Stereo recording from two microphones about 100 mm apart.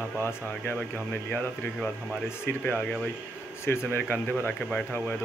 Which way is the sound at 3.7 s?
25° left (ahead or behind).